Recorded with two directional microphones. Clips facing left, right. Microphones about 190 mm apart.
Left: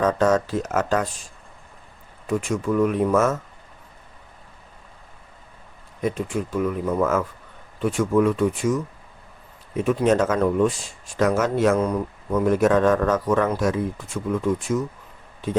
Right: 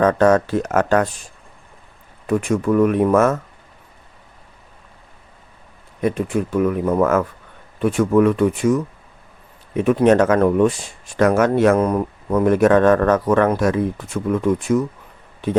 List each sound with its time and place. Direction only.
0.0 s speech: 60° right (ahead or behind)
6.0 s speech: 60° right (ahead or behind)